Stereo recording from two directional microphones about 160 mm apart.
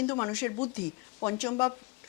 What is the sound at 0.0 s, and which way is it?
A woman's voice, 15° left (ahead or behind).